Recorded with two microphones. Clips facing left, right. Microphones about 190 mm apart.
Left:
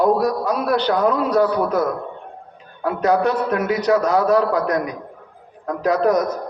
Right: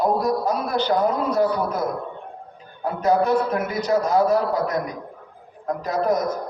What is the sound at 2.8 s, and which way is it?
A man's voice, 80° left.